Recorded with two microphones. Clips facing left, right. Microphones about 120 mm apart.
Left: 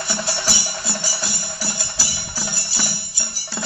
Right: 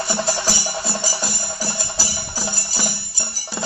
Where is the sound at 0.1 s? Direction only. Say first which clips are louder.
Right 2 dB; 40° right (ahead or behind).